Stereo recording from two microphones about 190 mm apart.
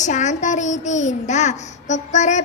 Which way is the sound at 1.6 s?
40° left (ahead or behind).